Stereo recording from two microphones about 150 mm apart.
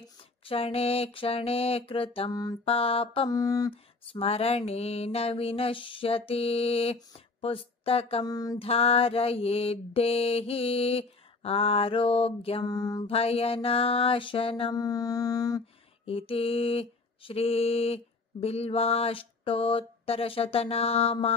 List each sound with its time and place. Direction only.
0.5 s mantra: 40° left (ahead or behind)
3.3 s mantra: 25° left (ahead or behind)
3.7 s mantra: 40° left (ahead or behind)
7.4 s speech: 40° left (ahead or behind)
8.2 s mantra: 25° left (ahead or behind)
8.5 s mantra: 40° left (ahead or behind)
12.6 s mantra: 25° left (ahead or behind)
13.0 s mantra: 40° left (ahead or behind)
14.7 s mantra: 25° left (ahead or behind)
15.6 s a sound: 40° left (ahead or behind)